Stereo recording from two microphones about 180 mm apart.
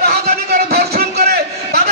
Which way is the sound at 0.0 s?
65° right (ahead or behind).